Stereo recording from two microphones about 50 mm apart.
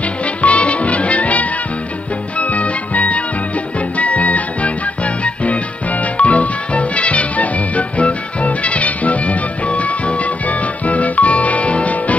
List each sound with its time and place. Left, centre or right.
0.4 s music: left